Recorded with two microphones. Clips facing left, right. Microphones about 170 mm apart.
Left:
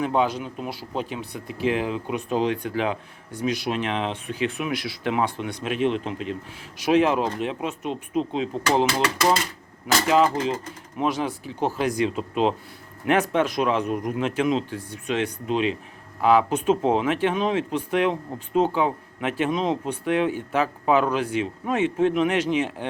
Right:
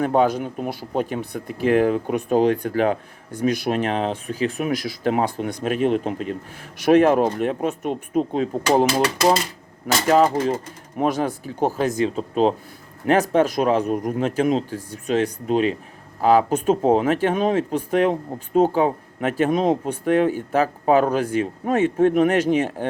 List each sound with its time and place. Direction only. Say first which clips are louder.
0.0 s speech: right 4 dB; 50° right (ahead or behind)